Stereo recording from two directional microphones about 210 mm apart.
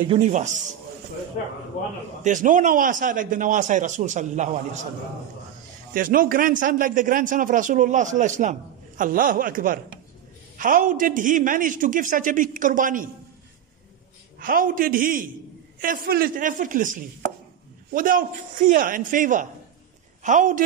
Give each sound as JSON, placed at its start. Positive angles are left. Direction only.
{"t": 0.1, "sound": "a man's voice", "side_deg": -35}
{"t": 2.2, "sound": "a man's voice", "side_deg": -35}
{"t": 5.9, "sound": "a man's voice", "side_deg": -40}
{"t": 14.4, "sound": "a man's voice", "side_deg": -40}